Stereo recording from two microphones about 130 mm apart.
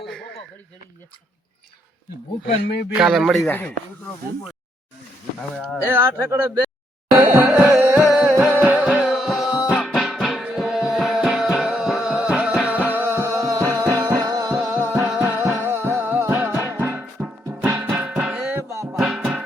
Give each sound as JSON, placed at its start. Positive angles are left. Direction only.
{"t": 2.9, "sound": "speech", "side_deg": -5}
{"t": 5.5, "sound": "speech", "side_deg": -15}
{"t": 7.3, "sound": "music", "side_deg": -15}
{"t": 14.9, "sound": "music", "side_deg": -5}